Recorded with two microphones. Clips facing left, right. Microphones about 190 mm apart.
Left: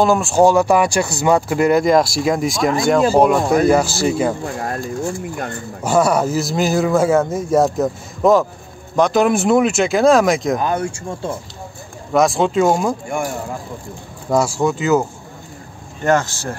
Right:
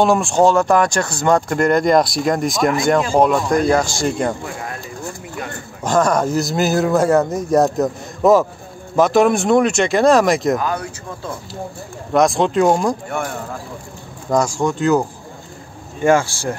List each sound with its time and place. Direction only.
0.0 s speech: centre (ahead or behind)
4.6 s speech: 45° left (ahead or behind)
5.9 s speech: 10° left (ahead or behind)
10.6 s speech: 25° left (ahead or behind)
12.1 s speech: centre (ahead or behind)
14.3 s speech: 5° left (ahead or behind)
16.0 s speech: 10° right (ahead or behind)